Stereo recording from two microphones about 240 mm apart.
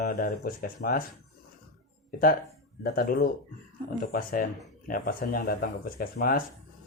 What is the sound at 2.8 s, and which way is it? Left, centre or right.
Speech, left.